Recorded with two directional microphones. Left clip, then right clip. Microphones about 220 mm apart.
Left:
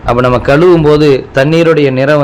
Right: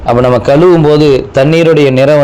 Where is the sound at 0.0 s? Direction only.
Centre (ahead or behind).